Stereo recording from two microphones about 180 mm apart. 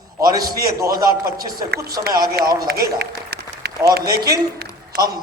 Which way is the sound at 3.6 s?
60° right (ahead or behind).